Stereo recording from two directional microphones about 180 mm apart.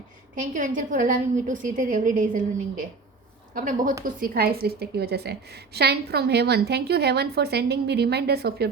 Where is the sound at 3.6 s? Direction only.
50° right (ahead or behind).